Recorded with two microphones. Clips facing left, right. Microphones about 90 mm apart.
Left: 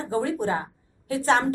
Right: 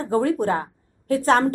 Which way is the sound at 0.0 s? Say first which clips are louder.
Right 5 dB; 50° right (ahead or behind).